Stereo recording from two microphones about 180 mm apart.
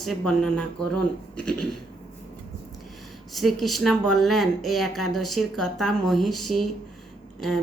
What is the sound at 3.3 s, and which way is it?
Speech, centre (ahead or behind).